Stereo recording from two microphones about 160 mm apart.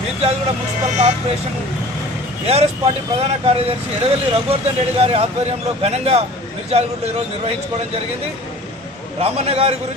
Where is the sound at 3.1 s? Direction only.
40° right (ahead or behind).